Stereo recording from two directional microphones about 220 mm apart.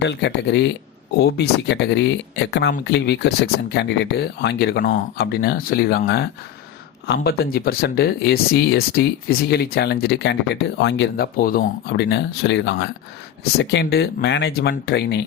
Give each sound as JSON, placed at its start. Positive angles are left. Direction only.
{"t": 0.0, "sound": "speech", "side_deg": 50}